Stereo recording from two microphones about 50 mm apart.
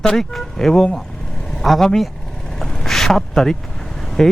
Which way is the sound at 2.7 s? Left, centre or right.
Centre.